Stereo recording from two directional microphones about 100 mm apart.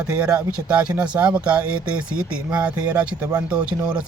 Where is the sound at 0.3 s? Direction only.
10° right (ahead or behind).